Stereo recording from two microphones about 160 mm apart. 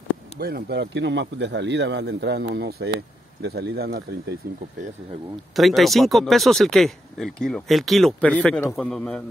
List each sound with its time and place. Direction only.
0.4 s a man's voice: 80° right
5.6 s speech: centre (ahead or behind)